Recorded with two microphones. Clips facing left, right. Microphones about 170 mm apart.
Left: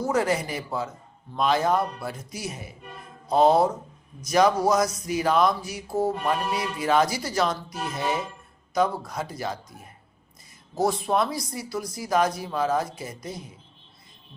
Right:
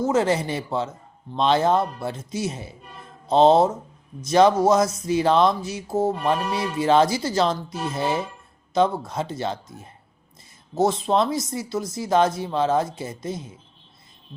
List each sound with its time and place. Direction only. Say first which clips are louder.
0.0 s speech: right 3 dB; 25° right (ahead or behind)